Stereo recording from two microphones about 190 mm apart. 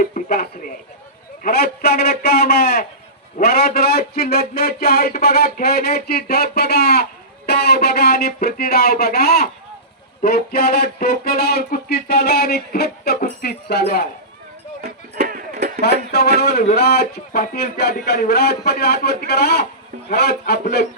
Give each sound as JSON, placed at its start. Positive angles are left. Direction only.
{"t": 0.0, "sound": "speech", "side_deg": 50}
{"t": 14.8, "sound": "music", "side_deg": -55}
{"t": 16.4, "sound": "speech", "side_deg": 60}